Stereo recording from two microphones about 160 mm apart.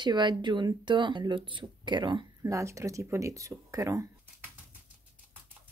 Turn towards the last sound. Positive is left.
turn(degrees=-20)  # may be behind; listen again after turning